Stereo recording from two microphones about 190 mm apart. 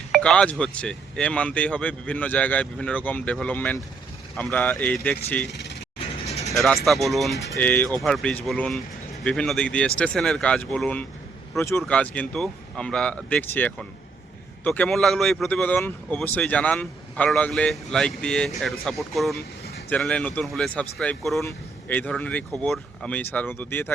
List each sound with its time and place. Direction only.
0.1 s speech: 5° left (ahead or behind)
6.2 s vehicle: 35° left (ahead or behind)
6.8 s speech: centre (ahead or behind)